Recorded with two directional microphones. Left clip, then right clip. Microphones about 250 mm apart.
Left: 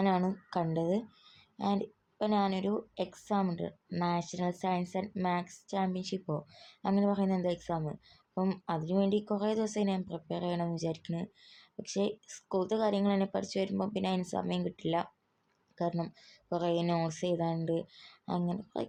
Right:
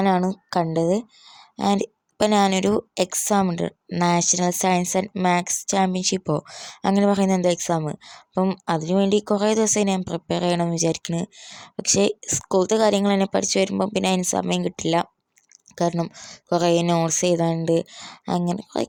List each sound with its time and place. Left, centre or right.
0.0 s a woman's voice: right